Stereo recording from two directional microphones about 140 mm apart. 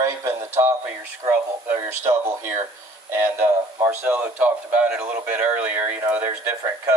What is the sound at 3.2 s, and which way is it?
A man's voice, 15° right (ahead or behind).